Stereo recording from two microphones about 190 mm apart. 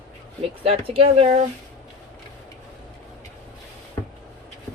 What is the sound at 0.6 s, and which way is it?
Speech, 30° right (ahead or behind).